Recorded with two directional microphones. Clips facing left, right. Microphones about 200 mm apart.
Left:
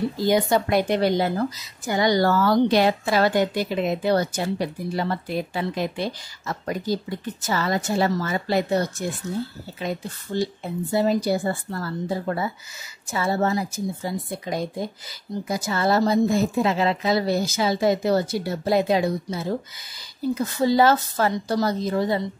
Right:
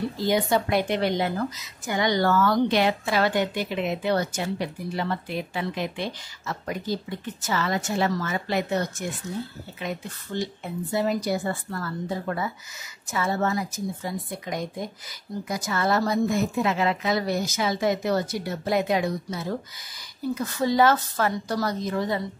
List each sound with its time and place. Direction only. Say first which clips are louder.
0.3 s a woman's voice: left 2 dB; 40° left (ahead or behind)